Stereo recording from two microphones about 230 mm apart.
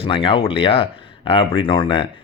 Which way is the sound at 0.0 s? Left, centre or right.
Left.